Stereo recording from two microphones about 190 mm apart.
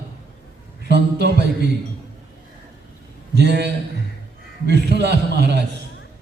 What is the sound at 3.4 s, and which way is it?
Mantra, 60° right (ahead or behind).